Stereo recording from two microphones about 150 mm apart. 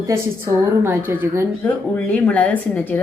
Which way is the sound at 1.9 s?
10° left (ahead or behind).